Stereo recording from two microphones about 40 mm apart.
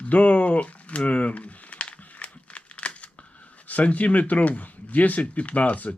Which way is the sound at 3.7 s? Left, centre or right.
Left.